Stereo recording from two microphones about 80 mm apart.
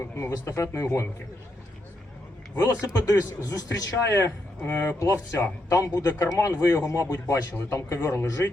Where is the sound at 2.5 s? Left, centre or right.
Left.